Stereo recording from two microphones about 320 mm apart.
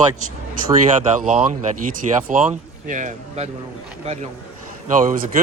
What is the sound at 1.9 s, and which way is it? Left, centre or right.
Speech, right.